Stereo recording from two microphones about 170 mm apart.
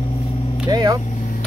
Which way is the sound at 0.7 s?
25° right (ahead or behind).